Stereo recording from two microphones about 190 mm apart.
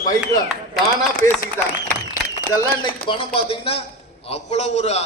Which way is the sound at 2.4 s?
15° left (ahead or behind).